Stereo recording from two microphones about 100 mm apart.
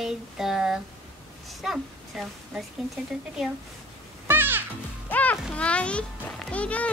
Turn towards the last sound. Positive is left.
turn(degrees=15)  # may be behind; listen again after turning